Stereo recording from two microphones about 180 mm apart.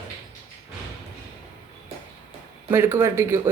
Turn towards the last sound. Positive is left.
turn(degrees=-15)  # may be behind; listen again after turning